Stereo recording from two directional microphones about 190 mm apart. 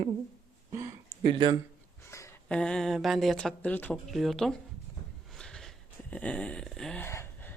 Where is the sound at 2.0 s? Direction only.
15° left (ahead or behind).